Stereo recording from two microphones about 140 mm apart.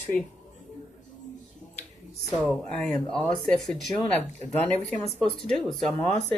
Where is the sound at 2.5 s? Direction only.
Centre (ahead or behind).